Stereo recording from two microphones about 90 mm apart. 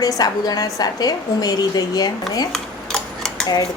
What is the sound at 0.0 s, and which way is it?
A woman's voice, 45° left (ahead or behind).